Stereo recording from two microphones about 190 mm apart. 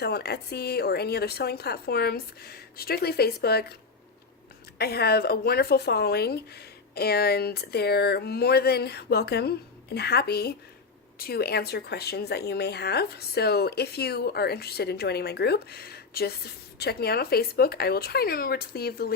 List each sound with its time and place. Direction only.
0.0 s speech: 55° left (ahead or behind)
4.8 s speech: 55° left (ahead or behind)